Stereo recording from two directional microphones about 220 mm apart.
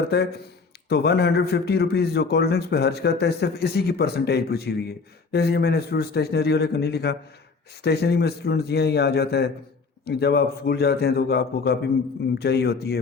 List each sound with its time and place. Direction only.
0.1 s speech: 45° left (ahead or behind)